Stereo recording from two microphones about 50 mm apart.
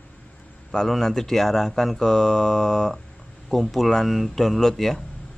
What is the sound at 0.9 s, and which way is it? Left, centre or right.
Speech, centre.